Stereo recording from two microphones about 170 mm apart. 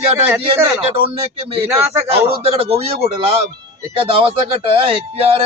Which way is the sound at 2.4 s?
35° right (ahead or behind).